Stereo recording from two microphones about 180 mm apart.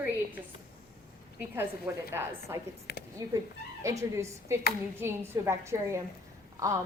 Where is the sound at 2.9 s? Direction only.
65° left (ahead or behind).